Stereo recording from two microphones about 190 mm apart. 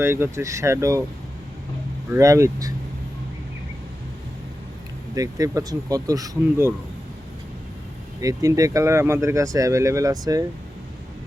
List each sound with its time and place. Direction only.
0.0 s speech: 10° right (ahead or behind)
2.1 s speech: 15° right (ahead or behind)
5.1 s speech: 20° right (ahead or behind)
8.2 s speech: 20° right (ahead or behind)